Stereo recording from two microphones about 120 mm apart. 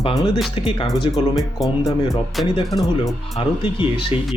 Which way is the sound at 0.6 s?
45° left (ahead or behind).